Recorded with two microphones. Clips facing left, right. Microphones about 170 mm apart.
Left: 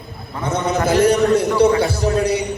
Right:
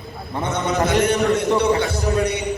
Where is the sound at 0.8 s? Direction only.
30° left (ahead or behind).